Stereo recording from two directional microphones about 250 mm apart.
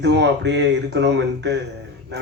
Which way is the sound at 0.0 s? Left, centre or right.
Right.